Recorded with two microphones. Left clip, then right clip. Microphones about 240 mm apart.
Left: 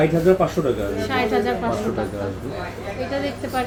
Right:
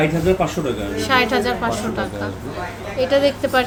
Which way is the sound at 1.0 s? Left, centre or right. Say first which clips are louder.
Right 6 dB; right.